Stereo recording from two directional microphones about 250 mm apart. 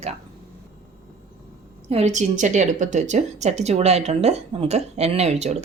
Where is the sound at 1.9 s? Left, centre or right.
Right.